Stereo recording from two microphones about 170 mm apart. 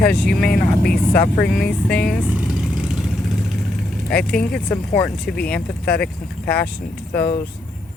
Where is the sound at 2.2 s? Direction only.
5° right (ahead or behind).